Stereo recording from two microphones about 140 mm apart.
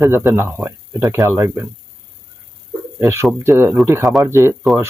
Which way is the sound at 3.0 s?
20° right (ahead or behind).